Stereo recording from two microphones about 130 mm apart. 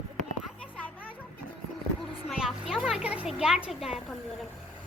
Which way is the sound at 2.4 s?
5° right (ahead or behind).